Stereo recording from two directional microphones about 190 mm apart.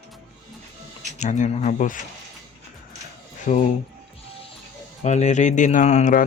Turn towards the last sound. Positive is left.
turn(degrees=35)  # may be behind; listen again after turning